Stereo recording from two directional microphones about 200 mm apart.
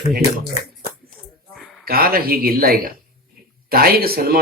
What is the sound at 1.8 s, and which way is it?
Speech, 50° right (ahead or behind).